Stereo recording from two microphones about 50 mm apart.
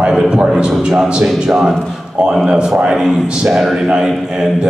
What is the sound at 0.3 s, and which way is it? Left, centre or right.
A man's voice, centre.